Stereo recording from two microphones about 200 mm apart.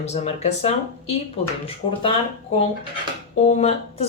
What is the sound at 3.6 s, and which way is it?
Speech, 30° left (ahead or behind).